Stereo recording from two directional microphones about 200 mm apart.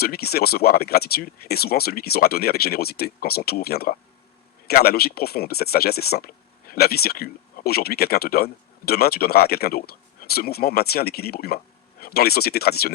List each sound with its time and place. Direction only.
0.0 s speech: 50° left (ahead or behind)